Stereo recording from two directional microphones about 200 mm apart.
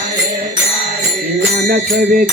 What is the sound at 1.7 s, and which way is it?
Music, 50° right (ahead or behind).